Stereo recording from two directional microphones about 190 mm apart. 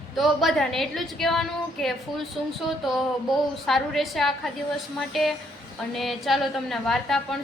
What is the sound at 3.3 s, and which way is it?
A woman's voice, centre (ahead or behind).